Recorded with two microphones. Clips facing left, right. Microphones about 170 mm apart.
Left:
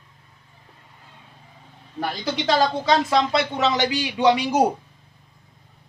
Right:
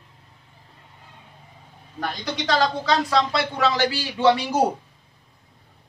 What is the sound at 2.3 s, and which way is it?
Speech, 25° left (ahead or behind).